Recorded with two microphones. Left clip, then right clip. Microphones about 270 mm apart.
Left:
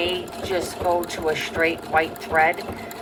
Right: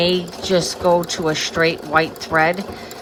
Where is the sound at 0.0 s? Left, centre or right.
Right.